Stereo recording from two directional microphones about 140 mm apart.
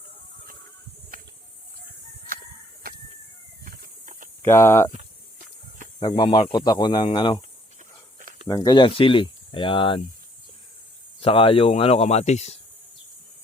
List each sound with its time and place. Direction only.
3.6 s a sound: 90° right; by 4.3 s 70° right (ahead or behind)
4.4 s speech: 20° left (ahead or behind)
6.0 s speech: 30° left (ahead or behind)
8.4 s speech: 25° left (ahead or behind)
11.2 s speech: 40° left (ahead or behind)